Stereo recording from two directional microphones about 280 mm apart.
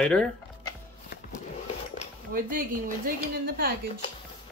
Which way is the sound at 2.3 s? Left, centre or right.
Right.